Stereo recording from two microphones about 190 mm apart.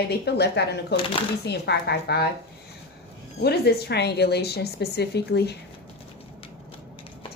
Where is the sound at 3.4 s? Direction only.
60° left (ahead or behind).